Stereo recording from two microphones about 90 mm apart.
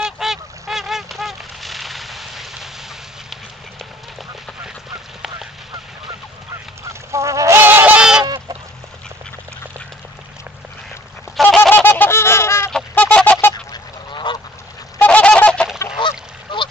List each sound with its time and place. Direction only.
0.0 s honk: 5° right (ahead or behind)
6.8 s goose: 35° right (ahead or behind); by 8.3 s 10° right (ahead or behind)
11.4 s goose: centre (ahead or behind)
11.7 s goose: 20° left (ahead or behind)
12.9 s fowl: 15° left (ahead or behind)
13.7 s goose: 55° left (ahead or behind)
15.0 s goose: 15° left (ahead or behind)
16.0 s goose: 75° left (ahead or behind)